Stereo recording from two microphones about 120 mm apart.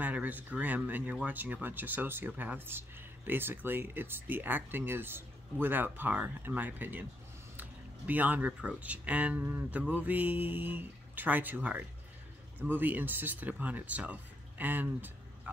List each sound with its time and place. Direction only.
0.0 s speech: 15° right (ahead or behind)
8.1 s speech: 15° right (ahead or behind)